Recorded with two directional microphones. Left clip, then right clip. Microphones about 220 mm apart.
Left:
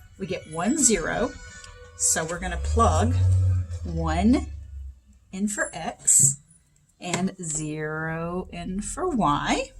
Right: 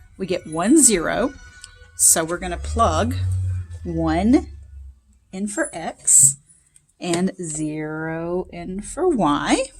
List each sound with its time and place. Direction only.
0.2 s speech: 45° right (ahead or behind)
3.9 s speech: 35° right (ahead or behind)
7.0 s speech: 40° right (ahead or behind)
7.6 s speech: 25° right (ahead or behind); by 9.7 s 45° right (ahead or behind)